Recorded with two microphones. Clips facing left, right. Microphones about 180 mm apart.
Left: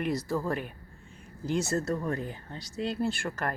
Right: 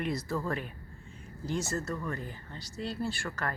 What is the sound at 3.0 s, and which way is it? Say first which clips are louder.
Speech: left 4 dB; 20° left (ahead or behind).